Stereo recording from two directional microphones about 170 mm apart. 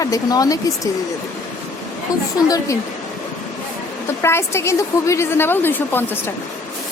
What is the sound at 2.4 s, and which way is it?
Speech, 20° left (ahead or behind).